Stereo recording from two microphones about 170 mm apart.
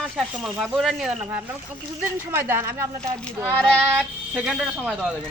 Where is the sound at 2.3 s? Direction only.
15° right (ahead or behind).